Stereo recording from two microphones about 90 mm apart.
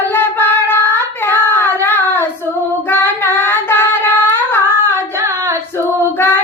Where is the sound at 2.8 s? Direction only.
25° left (ahead or behind).